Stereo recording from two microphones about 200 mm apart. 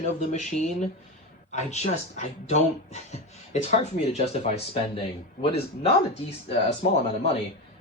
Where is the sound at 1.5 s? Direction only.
35° left (ahead or behind).